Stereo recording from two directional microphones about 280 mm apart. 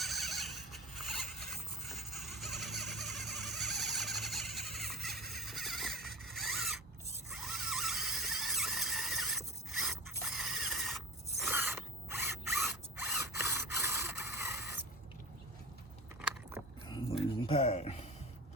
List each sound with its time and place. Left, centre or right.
0.0 s squeal: centre
12.5 s mechanisms: centre
16.2 s biting: centre
17.4 s a sound: left